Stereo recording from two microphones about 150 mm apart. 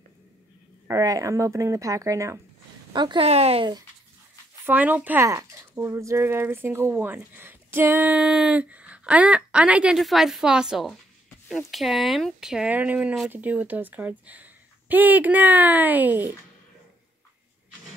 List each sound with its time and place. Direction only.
0.8 s speech: 20° right (ahead or behind)
2.9 s a woman's voice: 30° right (ahead or behind)
3.3 s speech: 45° right (ahead or behind)
4.6 s speech: 10° right (ahead or behind)